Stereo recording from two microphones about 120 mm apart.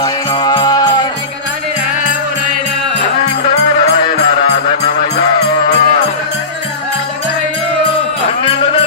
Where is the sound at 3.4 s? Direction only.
70° left (ahead or behind).